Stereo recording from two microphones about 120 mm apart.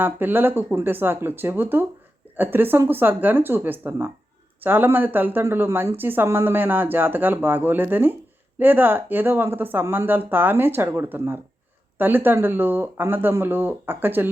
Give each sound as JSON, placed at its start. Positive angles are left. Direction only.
{"t": 0.0, "sound": "speech", "side_deg": -15}